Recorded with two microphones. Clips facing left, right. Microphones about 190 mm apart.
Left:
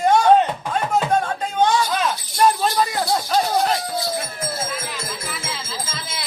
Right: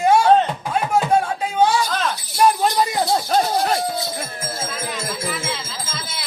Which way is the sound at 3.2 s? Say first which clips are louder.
Right 1 dB; 45° right (ahead or behind).